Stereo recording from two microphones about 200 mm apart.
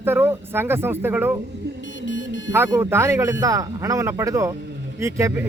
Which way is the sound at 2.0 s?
65° left (ahead or behind).